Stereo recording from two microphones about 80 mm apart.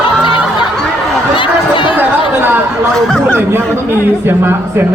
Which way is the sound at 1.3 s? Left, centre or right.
Left.